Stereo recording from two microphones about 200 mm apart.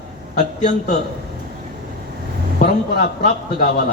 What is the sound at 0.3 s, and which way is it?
Speech, 35° left (ahead or behind).